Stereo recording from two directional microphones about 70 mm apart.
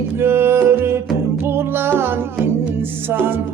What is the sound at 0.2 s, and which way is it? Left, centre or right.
Music, right.